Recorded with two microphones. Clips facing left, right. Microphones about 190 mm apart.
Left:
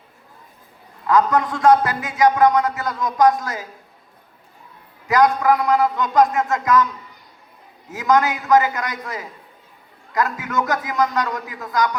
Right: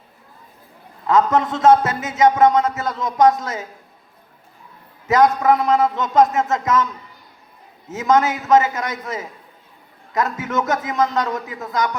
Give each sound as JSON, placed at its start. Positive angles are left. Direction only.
{"t": 1.0, "sound": "a man's voice", "side_deg": -25}
{"t": 5.0, "sound": "a man's voice", "side_deg": -25}
{"t": 7.9, "sound": "a man's voice", "side_deg": -25}